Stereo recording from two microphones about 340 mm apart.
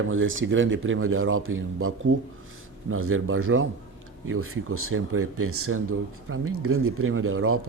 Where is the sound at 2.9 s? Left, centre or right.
Right.